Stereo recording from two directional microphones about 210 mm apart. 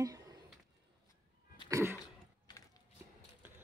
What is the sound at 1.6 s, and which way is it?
Cough, 15° right (ahead or behind).